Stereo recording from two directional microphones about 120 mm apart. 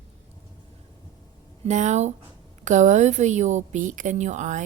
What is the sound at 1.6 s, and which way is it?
Speech, 80° right.